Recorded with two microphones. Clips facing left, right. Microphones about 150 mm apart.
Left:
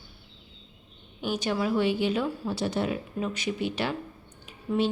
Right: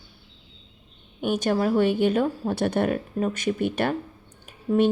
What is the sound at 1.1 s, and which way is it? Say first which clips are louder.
A woman's voice: right 5 dB; 50° right (ahead or behind).